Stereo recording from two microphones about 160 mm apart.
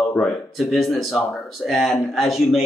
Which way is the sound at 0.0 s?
Centre (ahead or behind).